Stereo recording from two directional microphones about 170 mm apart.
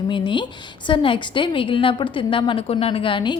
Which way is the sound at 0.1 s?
30° left (ahead or behind).